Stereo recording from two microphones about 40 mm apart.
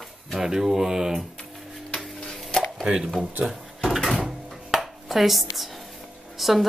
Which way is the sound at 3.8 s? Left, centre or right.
Centre.